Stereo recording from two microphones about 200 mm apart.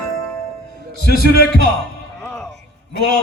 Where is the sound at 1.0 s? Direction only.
50° left (ahead or behind).